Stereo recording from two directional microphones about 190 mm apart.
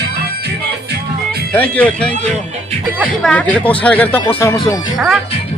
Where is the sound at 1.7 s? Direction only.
5° left (ahead or behind).